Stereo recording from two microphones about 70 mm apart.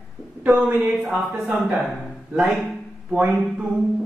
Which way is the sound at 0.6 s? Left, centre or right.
Centre.